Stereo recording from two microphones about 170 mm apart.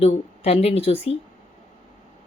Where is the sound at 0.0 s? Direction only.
35° left (ahead or behind).